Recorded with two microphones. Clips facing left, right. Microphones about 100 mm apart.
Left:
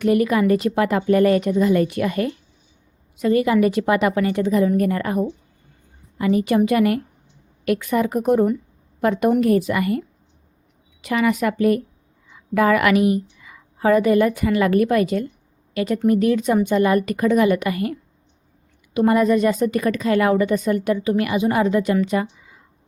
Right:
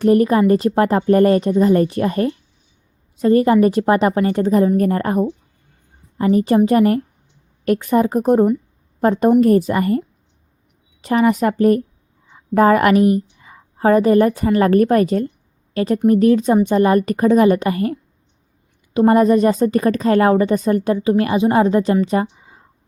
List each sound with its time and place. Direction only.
0.0 s a woman's voice: 35° right (ahead or behind)